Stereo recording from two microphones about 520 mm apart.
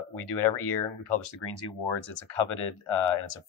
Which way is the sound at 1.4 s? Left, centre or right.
Left.